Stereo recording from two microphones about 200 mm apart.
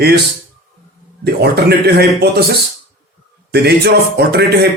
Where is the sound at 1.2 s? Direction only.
55° right (ahead or behind).